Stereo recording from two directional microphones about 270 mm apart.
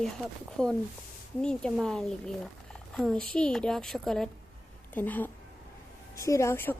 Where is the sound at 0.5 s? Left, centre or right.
Centre.